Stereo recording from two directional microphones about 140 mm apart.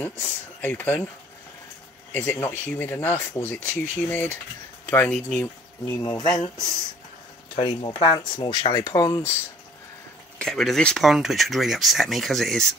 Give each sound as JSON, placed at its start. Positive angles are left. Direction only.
{"t": 0.6, "sound": "speech", "side_deg": 15}
{"t": 2.1, "sound": "speech", "side_deg": 15}
{"t": 6.0, "sound": "speech", "side_deg": 30}
{"t": 7.5, "sound": "speech", "side_deg": 40}
{"t": 10.4, "sound": "speech", "side_deg": 0}